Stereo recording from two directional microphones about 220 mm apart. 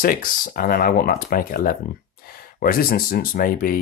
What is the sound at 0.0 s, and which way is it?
Speech, 40° left (ahead or behind).